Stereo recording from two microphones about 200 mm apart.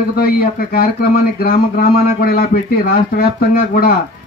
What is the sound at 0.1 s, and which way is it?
Speech, 50° left (ahead or behind).